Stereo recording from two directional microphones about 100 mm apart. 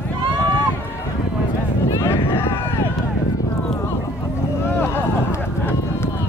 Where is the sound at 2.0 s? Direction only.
20° left (ahead or behind).